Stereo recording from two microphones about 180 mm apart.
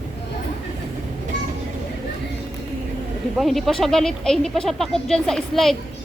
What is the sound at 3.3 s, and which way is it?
Speech, centre (ahead or behind).